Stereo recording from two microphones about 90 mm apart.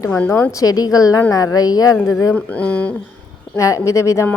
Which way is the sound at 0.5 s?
45° left (ahead or behind).